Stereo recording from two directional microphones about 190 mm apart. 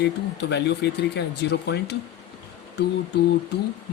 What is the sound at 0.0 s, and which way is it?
Speech, 65° left (ahead or behind).